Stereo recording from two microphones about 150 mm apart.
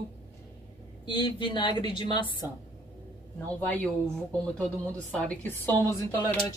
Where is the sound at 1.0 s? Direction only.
30° left (ahead or behind).